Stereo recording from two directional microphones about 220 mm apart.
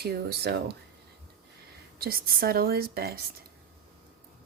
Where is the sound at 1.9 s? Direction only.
40° right (ahead or behind).